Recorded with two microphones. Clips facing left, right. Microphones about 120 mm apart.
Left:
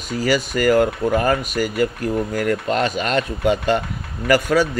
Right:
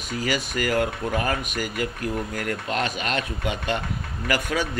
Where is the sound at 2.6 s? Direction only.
40° left (ahead or behind).